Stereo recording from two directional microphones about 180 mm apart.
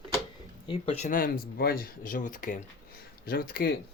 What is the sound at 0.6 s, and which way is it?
Speech, 30° left (ahead or behind).